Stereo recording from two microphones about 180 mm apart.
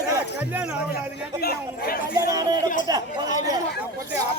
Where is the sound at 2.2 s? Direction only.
20° right (ahead or behind).